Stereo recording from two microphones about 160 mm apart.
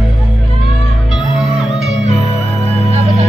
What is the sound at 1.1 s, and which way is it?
Music, 5° right (ahead or behind).